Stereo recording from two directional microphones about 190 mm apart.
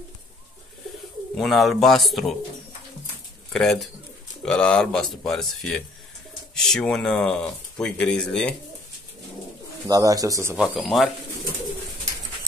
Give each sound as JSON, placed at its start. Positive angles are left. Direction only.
{"t": 1.3, "sound": "speech", "side_deg": 0}
{"t": 3.5, "sound": "speech", "side_deg": 0}
{"t": 9.8, "sound": "speech", "side_deg": -20}
{"t": 10.6, "sound": "speech", "side_deg": 0}